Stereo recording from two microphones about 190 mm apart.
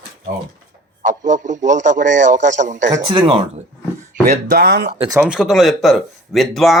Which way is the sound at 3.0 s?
30° right (ahead or behind).